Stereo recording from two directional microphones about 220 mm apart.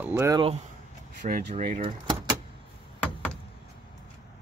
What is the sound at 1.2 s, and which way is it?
Speech, 40° right (ahead or behind).